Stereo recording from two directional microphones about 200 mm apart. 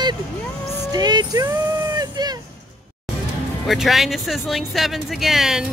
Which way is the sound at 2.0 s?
20° right (ahead or behind).